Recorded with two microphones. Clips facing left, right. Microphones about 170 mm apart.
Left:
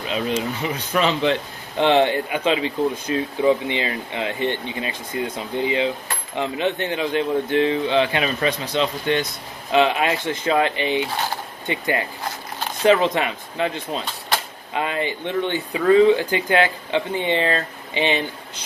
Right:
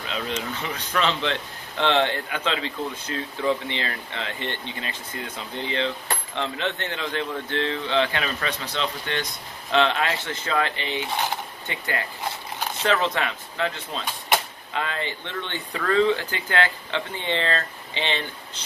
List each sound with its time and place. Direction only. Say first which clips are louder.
0.0 s speech: left 6 dB; 15° left (ahead or behind)